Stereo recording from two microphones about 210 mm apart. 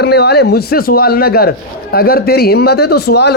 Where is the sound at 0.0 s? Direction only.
50° left (ahead or behind).